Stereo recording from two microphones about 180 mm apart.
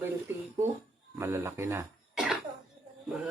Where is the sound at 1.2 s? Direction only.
15° right (ahead or behind).